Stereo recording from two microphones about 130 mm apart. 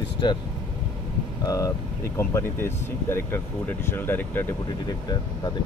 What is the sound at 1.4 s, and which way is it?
Speech, 25° left (ahead or behind).